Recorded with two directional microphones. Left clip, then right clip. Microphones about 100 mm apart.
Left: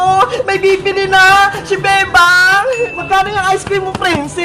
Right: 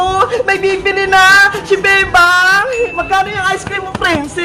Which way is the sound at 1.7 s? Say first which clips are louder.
Right 1 dB; 30° right (ahead or behind).